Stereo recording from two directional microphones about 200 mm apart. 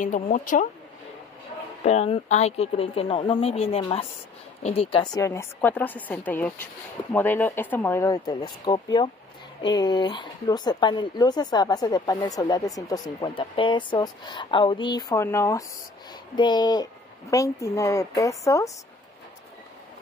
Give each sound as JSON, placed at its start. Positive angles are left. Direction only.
{"t": 0.0, "sound": "speech", "side_deg": 40}
{"t": 1.8, "sound": "a woman's voice", "side_deg": 35}